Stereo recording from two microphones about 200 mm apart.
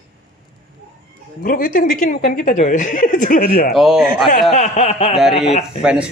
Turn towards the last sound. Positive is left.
turn(degrees=30)  # may be behind; listen again after turning